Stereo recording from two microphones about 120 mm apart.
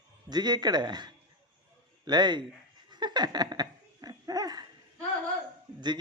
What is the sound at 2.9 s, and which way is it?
Laughter, 35° right (ahead or behind).